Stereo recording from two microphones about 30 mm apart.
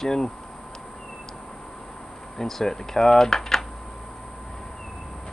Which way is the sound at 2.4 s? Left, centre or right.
Centre.